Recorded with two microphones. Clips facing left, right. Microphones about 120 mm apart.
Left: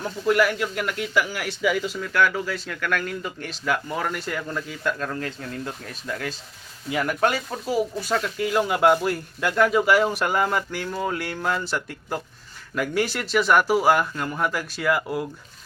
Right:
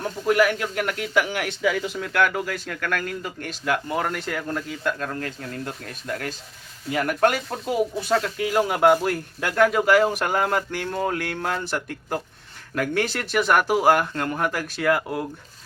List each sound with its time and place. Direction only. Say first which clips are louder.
0.0 s speech: right 1 dB; 45° right (ahead or behind)
7.7 s speech: right 1 dB; 20° right (ahead or behind)
8.1 s speech: right 1 dB; 40° right (ahead or behind); by 15.0 s 55° right (ahead or behind)